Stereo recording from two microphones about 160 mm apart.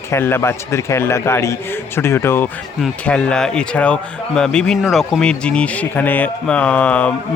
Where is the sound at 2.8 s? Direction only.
5° left (ahead or behind).